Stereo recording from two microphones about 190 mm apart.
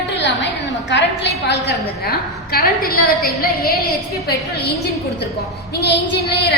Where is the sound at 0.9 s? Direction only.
65° left (ahead or behind); by 3.1 s 50° left (ahead or behind).